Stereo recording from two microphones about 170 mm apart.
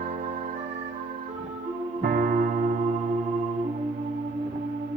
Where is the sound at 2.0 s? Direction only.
55° right (ahead or behind).